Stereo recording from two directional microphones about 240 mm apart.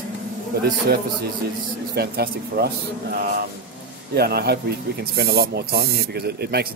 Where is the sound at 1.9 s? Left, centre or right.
Right.